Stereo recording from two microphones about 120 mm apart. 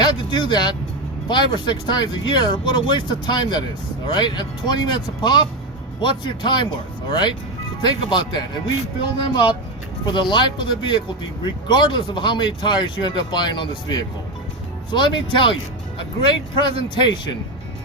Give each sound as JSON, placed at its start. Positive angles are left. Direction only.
{"t": 0.0, "sound": "speech", "side_deg": 40}